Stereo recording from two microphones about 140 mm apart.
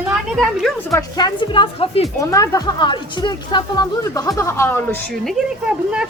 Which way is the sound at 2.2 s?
25° left (ahead or behind).